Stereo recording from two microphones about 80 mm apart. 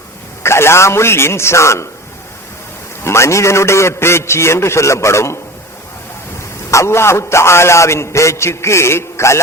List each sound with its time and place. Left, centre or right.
0.4 s a man's voice: left
3.0 s a man's voice: left
6.7 s a man's voice: left